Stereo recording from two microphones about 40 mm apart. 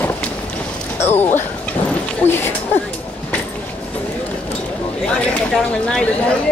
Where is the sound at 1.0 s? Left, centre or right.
Left.